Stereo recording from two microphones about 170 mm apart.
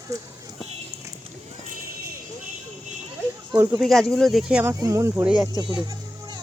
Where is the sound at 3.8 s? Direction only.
Centre (ahead or behind).